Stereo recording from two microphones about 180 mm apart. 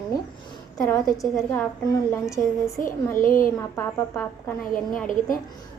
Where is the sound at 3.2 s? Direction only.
50° left (ahead or behind).